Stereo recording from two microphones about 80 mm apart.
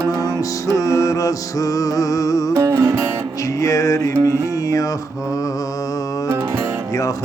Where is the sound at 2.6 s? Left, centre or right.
Right.